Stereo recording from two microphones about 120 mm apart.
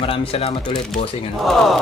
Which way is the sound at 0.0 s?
50° left (ahead or behind).